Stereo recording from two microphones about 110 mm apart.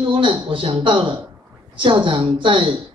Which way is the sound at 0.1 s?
50° right (ahead or behind).